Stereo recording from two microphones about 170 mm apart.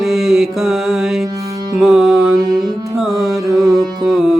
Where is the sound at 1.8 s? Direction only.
Centre (ahead or behind).